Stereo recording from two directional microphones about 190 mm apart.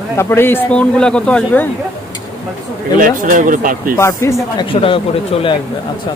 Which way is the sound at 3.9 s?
15° left (ahead or behind).